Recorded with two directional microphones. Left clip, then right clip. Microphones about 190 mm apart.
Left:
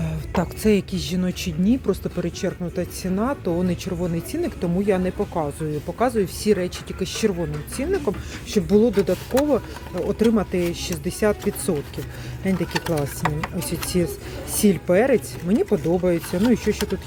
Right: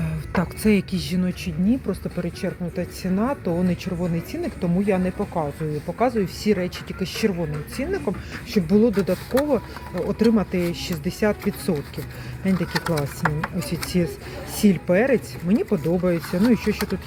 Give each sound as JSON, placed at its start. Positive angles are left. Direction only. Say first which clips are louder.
{"t": 0.0, "sound": "a woman's voice", "louder": "left 1 dB", "side_deg": 10}
{"t": 1.3, "sound": "speech", "louder": "left 3 dB", "side_deg": 25}
{"t": 3.0, "sound": "speech", "louder": "right 1 dB", "side_deg": 10}
{"t": 10.0, "sound": "speech", "louder": "even", "side_deg": 5}